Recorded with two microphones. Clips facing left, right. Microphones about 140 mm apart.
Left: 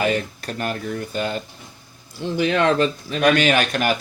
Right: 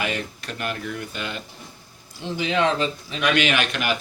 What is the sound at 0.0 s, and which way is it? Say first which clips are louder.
Speech: left 6 dB; 40° left (ahead or behind).